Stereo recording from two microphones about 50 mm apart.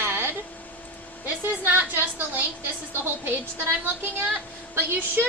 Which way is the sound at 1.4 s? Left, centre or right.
Right.